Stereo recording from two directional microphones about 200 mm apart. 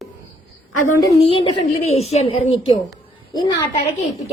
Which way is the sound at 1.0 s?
25° left (ahead or behind).